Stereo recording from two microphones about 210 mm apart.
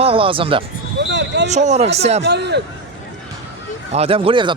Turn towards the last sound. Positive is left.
turn(degrees=-25)  # may be behind; listen again after turning